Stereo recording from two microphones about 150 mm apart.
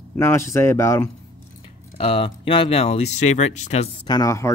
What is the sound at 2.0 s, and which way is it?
Speech, 35° left (ahead or behind).